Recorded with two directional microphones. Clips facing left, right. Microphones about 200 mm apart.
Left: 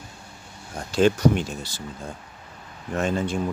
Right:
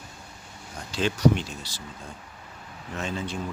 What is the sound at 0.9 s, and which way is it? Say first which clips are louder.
Speech: left 4 dB; 50° left (ahead or behind).